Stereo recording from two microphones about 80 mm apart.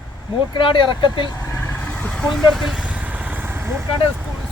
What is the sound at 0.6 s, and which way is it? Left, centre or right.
Speech, left.